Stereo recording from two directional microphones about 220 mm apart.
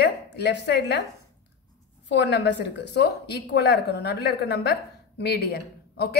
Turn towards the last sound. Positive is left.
turn(degrees=45)  # may be behind; listen again after turning